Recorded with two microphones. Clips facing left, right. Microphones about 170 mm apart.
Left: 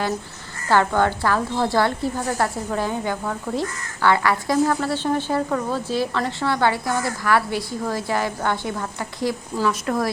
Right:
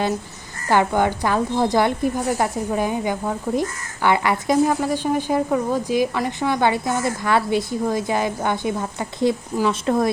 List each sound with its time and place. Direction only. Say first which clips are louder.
0.7 s a woman's voice: right 1 dB; 15° right (ahead or behind)